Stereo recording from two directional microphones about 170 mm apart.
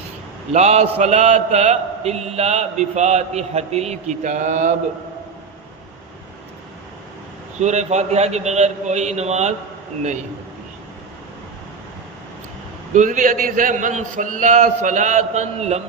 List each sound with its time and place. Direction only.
0.5 s a man's voice: 40° right (ahead or behind)
7.6 s a man's voice: 40° right (ahead or behind)
12.9 s a man's voice: 50° right (ahead or behind)